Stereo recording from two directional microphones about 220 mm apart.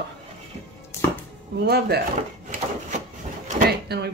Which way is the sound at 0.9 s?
10° left (ahead or behind).